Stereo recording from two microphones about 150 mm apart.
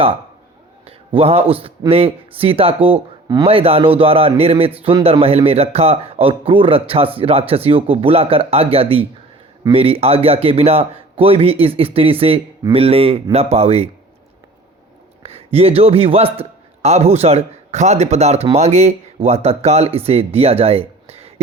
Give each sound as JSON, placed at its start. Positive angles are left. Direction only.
{"t": 0.9, "sound": "a man's voice", "side_deg": -40}
{"t": 15.2, "sound": "a man's voice", "side_deg": -40}